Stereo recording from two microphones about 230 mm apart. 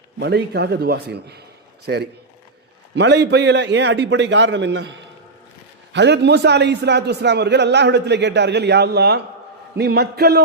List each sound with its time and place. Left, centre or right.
0.2 s a man's voice: right